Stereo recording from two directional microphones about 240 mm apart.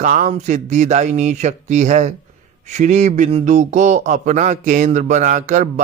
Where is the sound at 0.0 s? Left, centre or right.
Right.